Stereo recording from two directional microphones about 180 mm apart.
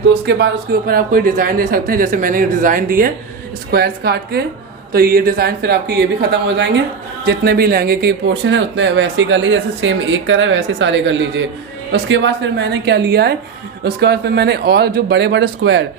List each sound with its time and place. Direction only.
0.1 s speech: 65° right (ahead or behind); by 3.1 s 50° right (ahead or behind)
3.7 s speech: 60° right (ahead or behind)
7.3 s speech: 60° right (ahead or behind); by 15.8 s 75° right (ahead or behind)